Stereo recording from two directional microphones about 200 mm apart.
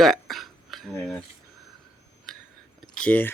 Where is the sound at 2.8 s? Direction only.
5° left (ahead or behind).